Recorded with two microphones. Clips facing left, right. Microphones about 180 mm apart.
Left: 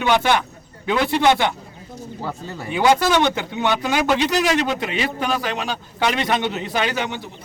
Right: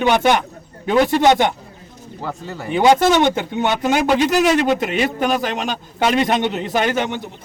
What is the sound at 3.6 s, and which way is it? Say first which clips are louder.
Speech: right 2 dB; 45° right (ahead or behind).